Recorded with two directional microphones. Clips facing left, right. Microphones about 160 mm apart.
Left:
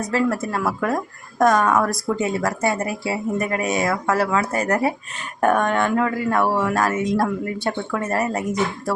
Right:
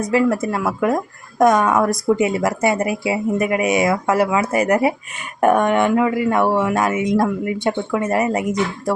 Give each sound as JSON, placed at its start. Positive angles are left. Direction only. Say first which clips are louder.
{"t": 0.1, "sound": "speech", "louder": "right 4 dB", "side_deg": -15}